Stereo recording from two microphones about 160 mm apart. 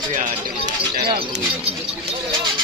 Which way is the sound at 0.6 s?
75° right (ahead or behind).